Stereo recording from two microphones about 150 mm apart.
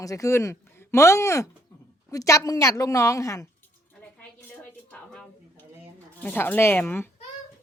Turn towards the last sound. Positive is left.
turn(degrees=10)  # may be behind; listen again after turning